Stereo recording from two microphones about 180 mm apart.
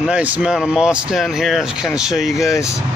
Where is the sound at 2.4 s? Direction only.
15° left (ahead or behind).